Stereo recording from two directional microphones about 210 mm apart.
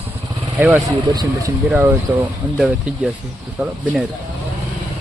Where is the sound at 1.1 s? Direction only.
20° right (ahead or behind); by 4.1 s centre (ahead or behind).